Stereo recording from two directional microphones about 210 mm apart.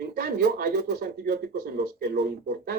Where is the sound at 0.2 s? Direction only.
45° right (ahead or behind).